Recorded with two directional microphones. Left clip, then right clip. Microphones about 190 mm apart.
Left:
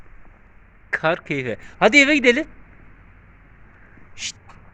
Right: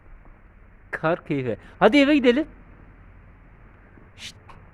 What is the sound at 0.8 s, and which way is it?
Speech, 10° right (ahead or behind).